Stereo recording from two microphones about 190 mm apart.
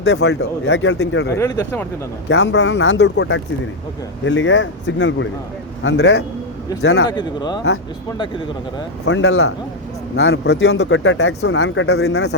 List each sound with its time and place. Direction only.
0.0 s speech: 75° left (ahead or behind); by 1.4 s 60° left (ahead or behind)
1.4 s speech: 15° left (ahead or behind)
2.3 s speech: 65° left (ahead or behind)
4.3 s speech: 80° left
5.8 s speech: 65° left (ahead or behind)
7.1 s speech: 20° left (ahead or behind)
9.0 s speech: 90° left
10.2 s speech: 60° left (ahead or behind)